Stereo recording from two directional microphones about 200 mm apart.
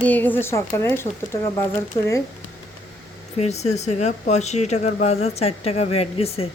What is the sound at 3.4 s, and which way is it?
Speech, 35° left (ahead or behind).